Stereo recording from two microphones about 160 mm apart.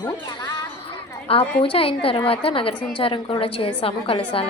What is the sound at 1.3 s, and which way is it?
A woman's voice, 35° left (ahead or behind).